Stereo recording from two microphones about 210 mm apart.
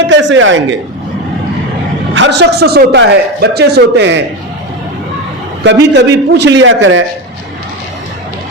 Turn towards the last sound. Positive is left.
turn(degrees=-65)  # may be behind; listen again after turning